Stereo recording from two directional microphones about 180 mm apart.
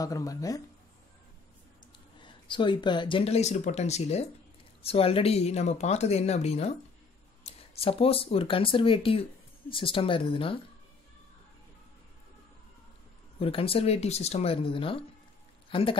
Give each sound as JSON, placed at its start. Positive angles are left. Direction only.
{"t": 0.0, "sound": "speech", "side_deg": 20}
{"t": 2.1, "sound": "speech", "side_deg": 25}
{"t": 13.4, "sound": "speech", "side_deg": 30}